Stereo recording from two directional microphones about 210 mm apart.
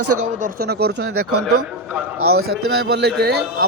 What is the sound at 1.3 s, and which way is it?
A man's voice, 90° right.